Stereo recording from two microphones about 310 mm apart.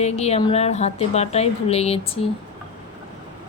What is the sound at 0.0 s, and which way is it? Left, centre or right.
A woman's voice, left.